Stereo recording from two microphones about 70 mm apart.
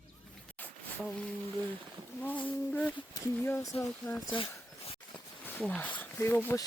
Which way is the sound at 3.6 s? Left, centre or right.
Left.